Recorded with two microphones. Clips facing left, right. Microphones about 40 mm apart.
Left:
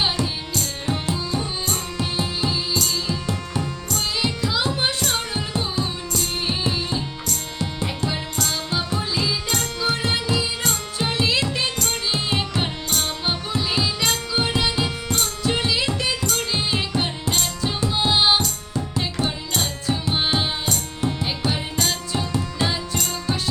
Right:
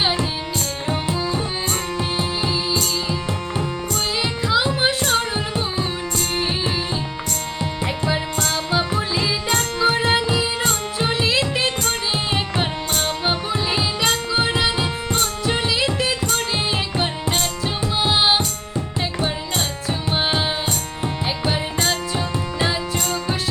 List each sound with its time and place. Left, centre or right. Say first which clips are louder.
0.0 s music: right 2 dB; centre
9.8 s carnatic music: right 6 dB; right; by 11.4 s centre
11.4 s music: right 3 dB; right; by 16.1 s centre
16.2 s music: right 2 dB; right
17.6 s music: right 1 dB; centre